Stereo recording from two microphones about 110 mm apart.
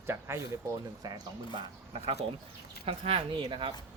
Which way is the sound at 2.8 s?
60° right (ahead or behind).